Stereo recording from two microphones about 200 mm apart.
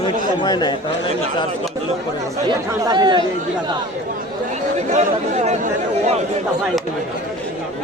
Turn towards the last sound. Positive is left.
turn(degrees=-35)  # may be behind; listen again after turning